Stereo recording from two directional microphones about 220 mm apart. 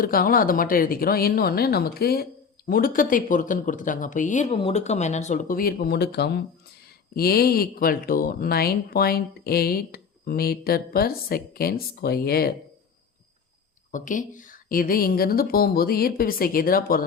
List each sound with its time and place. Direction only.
0.0 s speech: 40° left (ahead or behind)
13.9 s speech: 35° left (ahead or behind)